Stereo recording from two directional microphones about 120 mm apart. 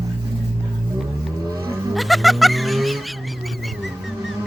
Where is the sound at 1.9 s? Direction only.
Centre (ahead or behind).